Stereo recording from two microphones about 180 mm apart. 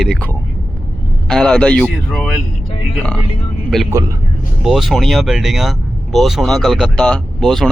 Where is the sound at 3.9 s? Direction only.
20° right (ahead or behind).